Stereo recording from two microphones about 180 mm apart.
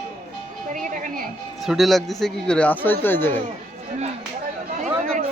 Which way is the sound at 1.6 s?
Centre (ahead or behind).